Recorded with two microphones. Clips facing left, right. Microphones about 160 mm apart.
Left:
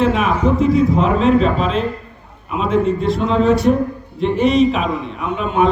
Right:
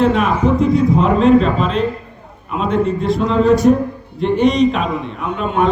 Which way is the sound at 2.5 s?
Centre (ahead or behind).